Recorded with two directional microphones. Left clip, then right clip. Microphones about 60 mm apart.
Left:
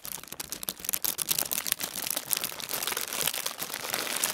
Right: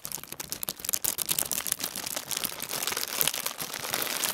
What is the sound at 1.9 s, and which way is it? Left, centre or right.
Crumpling, centre.